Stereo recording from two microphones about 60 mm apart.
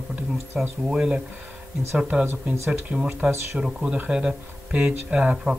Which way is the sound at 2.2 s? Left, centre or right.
Right.